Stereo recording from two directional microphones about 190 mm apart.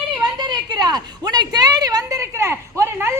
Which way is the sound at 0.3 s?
25° right (ahead or behind).